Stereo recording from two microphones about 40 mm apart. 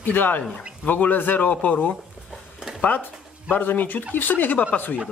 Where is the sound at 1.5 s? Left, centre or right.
Left.